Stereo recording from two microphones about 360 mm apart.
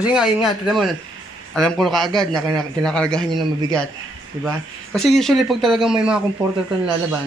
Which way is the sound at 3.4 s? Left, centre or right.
Centre.